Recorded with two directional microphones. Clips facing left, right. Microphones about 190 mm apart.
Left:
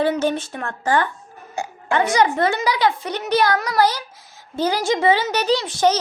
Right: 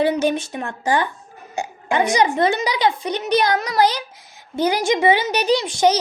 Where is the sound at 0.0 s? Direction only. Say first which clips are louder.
Right 1 dB; 15° right (ahead or behind).